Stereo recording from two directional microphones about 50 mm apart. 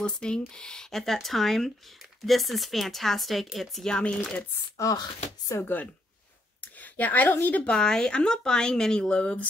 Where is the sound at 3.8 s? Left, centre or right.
Centre.